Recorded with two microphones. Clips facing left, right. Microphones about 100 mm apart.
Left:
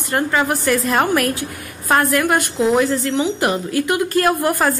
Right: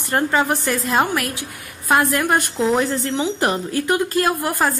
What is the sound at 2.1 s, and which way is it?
A woman's voice, 25° right (ahead or behind).